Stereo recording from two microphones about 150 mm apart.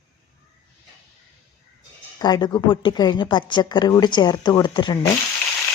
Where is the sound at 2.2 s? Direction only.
25° left (ahead or behind).